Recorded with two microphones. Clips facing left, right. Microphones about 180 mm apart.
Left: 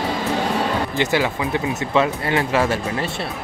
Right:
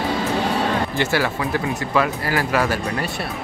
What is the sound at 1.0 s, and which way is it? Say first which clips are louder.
Speech: left 1 dB; 20° left (ahead or behind).